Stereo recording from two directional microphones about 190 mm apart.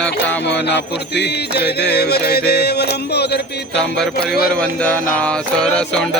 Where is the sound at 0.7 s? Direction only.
60° left (ahead or behind).